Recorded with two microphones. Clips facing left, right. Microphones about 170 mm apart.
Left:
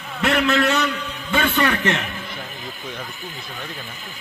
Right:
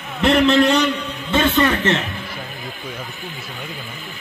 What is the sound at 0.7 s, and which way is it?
Speech, 5° left (ahead or behind).